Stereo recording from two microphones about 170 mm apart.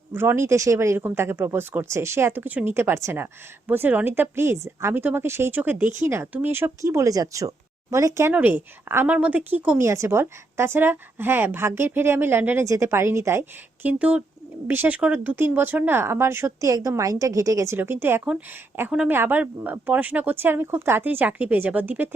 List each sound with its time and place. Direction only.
0.1 s speech: 15° right (ahead or behind)